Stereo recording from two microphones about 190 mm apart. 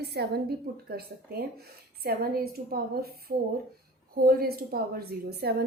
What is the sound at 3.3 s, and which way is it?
A woman's voice, 55° right (ahead or behind).